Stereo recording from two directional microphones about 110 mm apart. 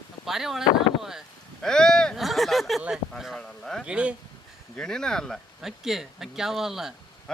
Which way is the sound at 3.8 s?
10° right (ahead or behind).